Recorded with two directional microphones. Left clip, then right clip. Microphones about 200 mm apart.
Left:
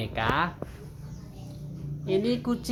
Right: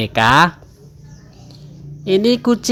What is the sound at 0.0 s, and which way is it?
Speech, 40° right (ahead or behind).